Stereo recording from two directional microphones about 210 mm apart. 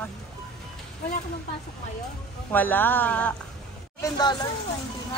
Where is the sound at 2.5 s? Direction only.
10° left (ahead or behind).